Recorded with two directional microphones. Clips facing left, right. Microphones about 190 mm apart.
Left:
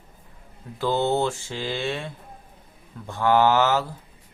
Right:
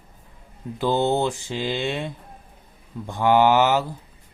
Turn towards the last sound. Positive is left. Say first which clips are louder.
# right 2 dB
turn(degrees=-15)  # may be behind; listen again after turning